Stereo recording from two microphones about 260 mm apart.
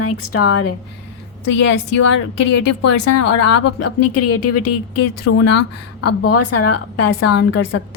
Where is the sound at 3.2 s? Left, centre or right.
Left.